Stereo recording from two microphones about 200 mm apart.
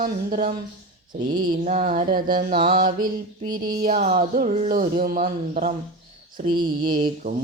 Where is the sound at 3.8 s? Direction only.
45° right (ahead or behind).